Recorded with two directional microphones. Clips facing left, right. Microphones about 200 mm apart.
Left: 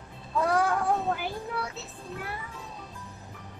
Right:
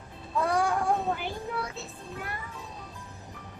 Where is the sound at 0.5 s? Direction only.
Centre (ahead or behind).